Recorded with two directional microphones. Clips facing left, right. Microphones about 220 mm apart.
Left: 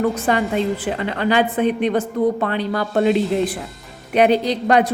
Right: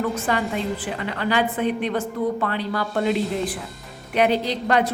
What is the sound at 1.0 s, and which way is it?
A woman's voice, 25° left (ahead or behind).